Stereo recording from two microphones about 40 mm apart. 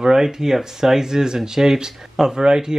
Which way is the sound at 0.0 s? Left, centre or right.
Centre.